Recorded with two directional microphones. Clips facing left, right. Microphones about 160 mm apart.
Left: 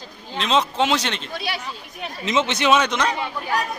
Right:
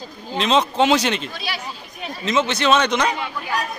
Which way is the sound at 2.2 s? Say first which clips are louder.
Right 1 dB; 20° left (ahead or behind).